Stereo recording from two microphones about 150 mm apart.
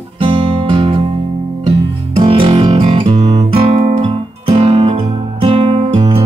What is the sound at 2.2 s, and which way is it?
Music, 35° right (ahead or behind).